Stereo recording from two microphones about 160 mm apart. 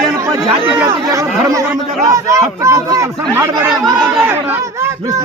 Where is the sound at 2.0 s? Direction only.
20° right (ahead or behind).